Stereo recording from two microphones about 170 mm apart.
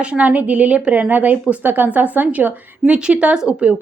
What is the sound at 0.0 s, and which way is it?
A woman's voice, 10° right (ahead or behind).